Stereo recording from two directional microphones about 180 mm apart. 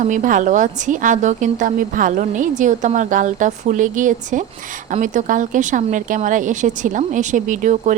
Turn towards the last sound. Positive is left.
turn(degrees=-45)  # may be behind; listen again after turning